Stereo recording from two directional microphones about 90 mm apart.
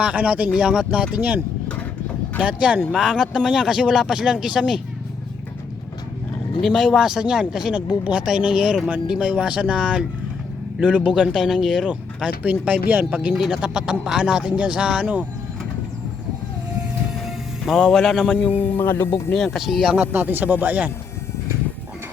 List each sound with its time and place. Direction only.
0.0 s speech: 15° right (ahead or behind)
2.4 s speech: 15° right (ahead or behind)
6.6 s speech: centre (ahead or behind)
17.2 s music: centre (ahead or behind)
18.3 s speech: 15° left (ahead or behind)
19.5 s speech: 5° right (ahead or behind)
20.0 s speech: 20° right (ahead or behind)